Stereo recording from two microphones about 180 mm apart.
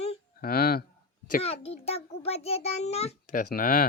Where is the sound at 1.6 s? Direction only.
35° left (ahead or behind).